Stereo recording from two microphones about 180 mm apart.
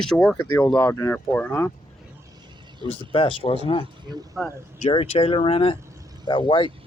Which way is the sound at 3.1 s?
30° left (ahead or behind).